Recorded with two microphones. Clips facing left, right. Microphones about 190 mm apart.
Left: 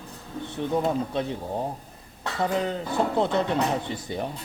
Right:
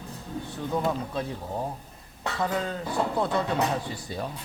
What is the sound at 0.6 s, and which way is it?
Speech, 25° left (ahead or behind).